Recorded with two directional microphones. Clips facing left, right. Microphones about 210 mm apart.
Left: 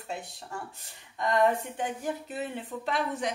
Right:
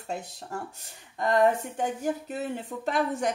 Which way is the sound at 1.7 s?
45° right (ahead or behind).